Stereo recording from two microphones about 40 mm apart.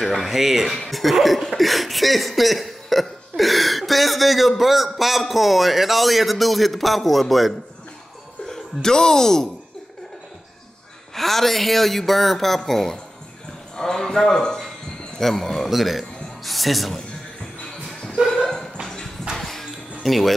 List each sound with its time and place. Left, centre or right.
0.0 s speech: centre
8.5 s speech: centre
11.1 s a man's voice: centre
18.3 s dog: centre
19.3 s music: centre
20.0 s speech: centre